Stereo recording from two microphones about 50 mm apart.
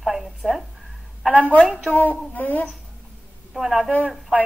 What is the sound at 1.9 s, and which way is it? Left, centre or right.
Speech, left.